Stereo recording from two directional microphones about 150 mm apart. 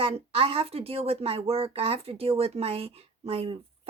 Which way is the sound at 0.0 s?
40° right (ahead or behind).